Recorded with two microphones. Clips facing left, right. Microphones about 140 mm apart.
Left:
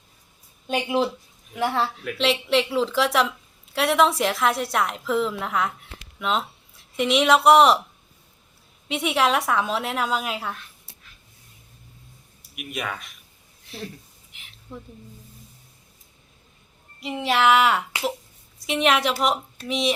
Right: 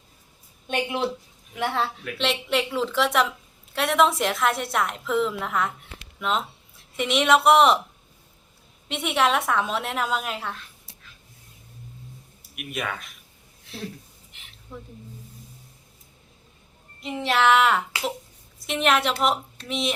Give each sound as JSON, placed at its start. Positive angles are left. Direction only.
{"t": 0.7, "sound": "a woman's voice", "side_deg": 0}
{"t": 8.9, "sound": "a woman's voice", "side_deg": 0}
{"t": 12.5, "sound": "a woman's voice", "side_deg": 0}
{"t": 14.3, "sound": "a sound", "side_deg": 0}
{"t": 17.0, "sound": "a woman's voice", "side_deg": 0}